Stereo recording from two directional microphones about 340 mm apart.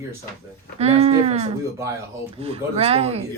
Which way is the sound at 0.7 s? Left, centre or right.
Centre.